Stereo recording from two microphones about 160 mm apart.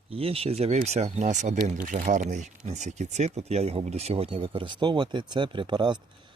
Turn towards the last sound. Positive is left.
turn(degrees=-30)  # may be behind; listen again after turning